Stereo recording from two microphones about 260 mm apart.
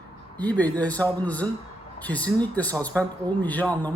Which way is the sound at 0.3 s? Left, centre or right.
Centre.